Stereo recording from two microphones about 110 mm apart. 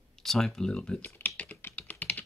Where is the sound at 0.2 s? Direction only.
5° left (ahead or behind).